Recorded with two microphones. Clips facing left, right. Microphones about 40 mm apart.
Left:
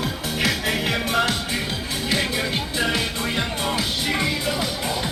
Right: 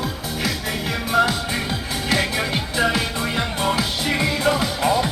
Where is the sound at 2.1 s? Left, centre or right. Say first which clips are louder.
Right 2 dB; centre.